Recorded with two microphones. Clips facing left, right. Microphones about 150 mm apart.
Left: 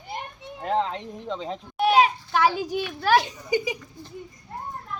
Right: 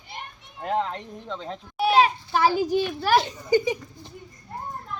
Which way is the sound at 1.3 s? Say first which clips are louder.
Left 1 dB; 5° left (ahead or behind).